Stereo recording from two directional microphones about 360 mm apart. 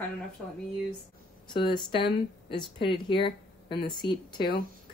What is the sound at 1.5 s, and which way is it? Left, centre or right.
Speech, centre.